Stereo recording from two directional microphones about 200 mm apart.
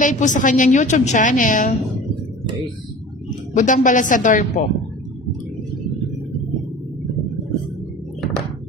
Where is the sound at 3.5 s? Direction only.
40° left (ahead or behind).